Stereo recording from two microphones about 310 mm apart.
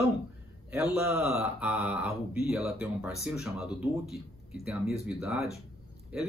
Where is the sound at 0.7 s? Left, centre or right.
Centre.